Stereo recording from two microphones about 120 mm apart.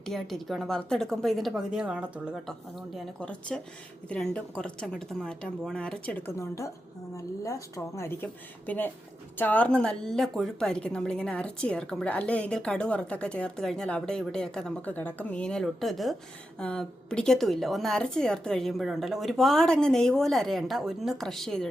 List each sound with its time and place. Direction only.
0.0 s a woman's voice: 5° left (ahead or behind)